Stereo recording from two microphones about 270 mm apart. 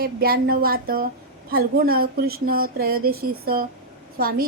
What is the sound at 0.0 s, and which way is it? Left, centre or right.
A woman's voice, right.